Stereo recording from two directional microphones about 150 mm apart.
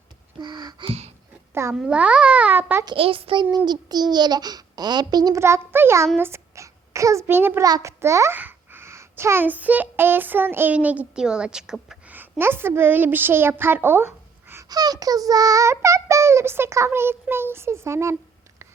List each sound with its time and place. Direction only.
0.3 s a child's voice: 30° right (ahead or behind)
1.7 s a child's voice: 5° right (ahead or behind)
2.8 s a child's voice: 35° right (ahead or behind); by 18.2 s 15° right (ahead or behind)